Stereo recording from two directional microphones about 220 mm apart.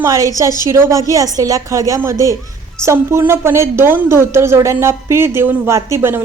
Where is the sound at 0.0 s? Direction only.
15° right (ahead or behind).